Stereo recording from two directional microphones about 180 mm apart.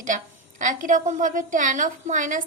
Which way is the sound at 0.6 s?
45° right (ahead or behind).